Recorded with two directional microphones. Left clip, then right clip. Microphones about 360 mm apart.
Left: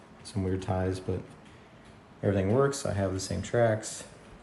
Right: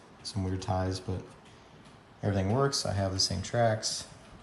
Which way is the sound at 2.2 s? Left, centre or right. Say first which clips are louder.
Left 3 dB; centre.